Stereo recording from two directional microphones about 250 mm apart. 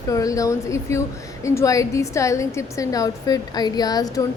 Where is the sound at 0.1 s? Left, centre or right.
Centre.